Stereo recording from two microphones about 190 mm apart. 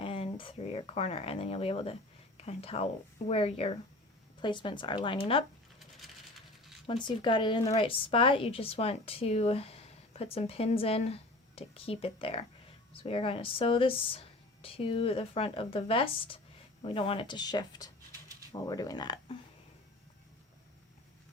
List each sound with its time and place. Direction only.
0.0 s a woman's voice: 30° left (ahead or behind)
6.8 s a woman's voice: 25° left (ahead or behind)